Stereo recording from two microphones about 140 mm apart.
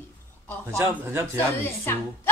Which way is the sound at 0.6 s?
20° right (ahead or behind).